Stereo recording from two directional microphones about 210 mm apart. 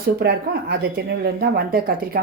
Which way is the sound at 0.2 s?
50° right (ahead or behind).